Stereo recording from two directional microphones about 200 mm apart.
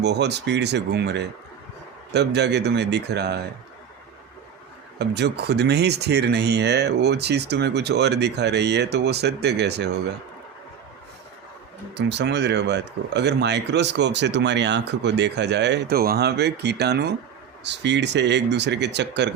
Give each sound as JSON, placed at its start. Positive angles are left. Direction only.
{"t": 0.0, "sound": "speech", "side_deg": -55}
{"t": 4.9, "sound": "speech", "side_deg": -55}
{"t": 11.9, "sound": "speech", "side_deg": -60}